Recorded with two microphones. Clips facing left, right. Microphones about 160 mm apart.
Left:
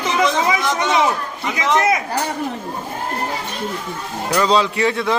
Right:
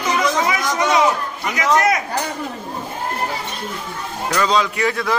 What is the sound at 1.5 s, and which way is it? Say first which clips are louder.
Speech: even; 25° left (ahead or behind).